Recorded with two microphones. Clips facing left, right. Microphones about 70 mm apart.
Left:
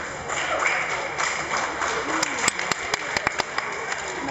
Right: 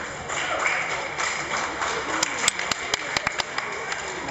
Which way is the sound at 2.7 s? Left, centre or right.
Left.